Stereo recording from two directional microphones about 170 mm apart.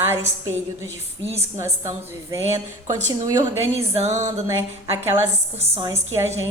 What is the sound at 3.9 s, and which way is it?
Music, 40° right (ahead or behind).